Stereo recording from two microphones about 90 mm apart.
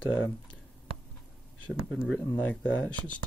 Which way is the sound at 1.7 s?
Centre (ahead or behind).